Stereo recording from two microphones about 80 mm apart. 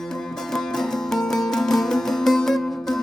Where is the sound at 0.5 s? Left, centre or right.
Centre.